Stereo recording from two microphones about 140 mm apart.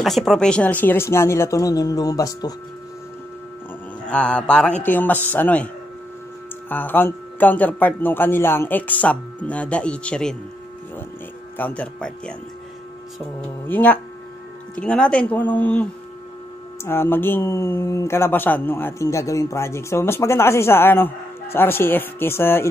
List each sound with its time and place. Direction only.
0.0 s speech: centre (ahead or behind); by 2.5 s 25° left (ahead or behind)
4.1 s speech: 10° left (ahead or behind)
6.7 s speech: 15° left (ahead or behind)
11.5 s speech: 10° left (ahead or behind)
13.7 s speech: 10° left (ahead or behind)